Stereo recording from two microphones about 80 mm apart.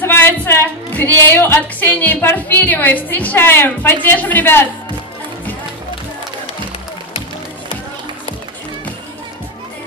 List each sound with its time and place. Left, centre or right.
0.0 s a woman's voice: left